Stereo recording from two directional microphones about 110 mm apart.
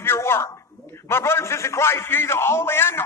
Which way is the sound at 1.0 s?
25° left (ahead or behind).